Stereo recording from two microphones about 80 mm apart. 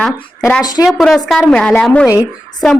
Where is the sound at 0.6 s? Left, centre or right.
Left.